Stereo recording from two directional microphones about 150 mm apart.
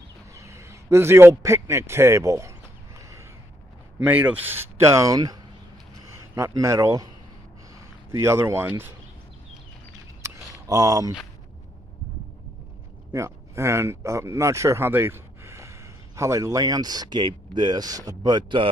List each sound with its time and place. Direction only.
0.3 s a man's voice: 20° right (ahead or behind)
4.0 s a man's voice: 10° right (ahead or behind)
8.1 s a man's voice: 20° right (ahead or behind)
10.2 s a sound: 20° right (ahead or behind)
13.1 s speech: 20° right (ahead or behind)